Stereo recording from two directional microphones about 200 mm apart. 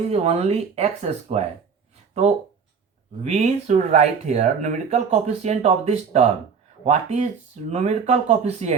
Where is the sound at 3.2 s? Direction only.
35° right (ahead or behind).